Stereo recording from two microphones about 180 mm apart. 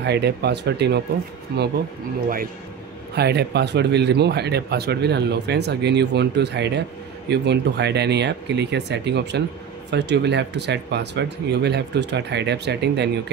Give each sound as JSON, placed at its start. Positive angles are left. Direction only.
{"t": 0.0, "sound": "speech", "side_deg": -65}
{"t": 3.2, "sound": "speech", "side_deg": -65}